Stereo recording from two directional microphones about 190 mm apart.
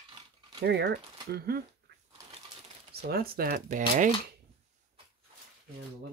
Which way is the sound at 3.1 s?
50° right (ahead or behind).